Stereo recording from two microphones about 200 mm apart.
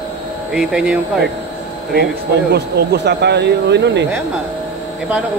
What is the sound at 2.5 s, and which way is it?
Speech, 55° right (ahead or behind).